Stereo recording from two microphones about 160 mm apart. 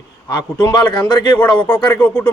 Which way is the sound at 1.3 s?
10° left (ahead or behind).